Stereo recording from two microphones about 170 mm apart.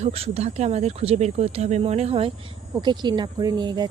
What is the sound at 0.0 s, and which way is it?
A woman's voice, 35° right (ahead or behind).